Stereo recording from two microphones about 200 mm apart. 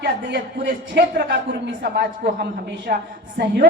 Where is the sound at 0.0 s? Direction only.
60° right (ahead or behind).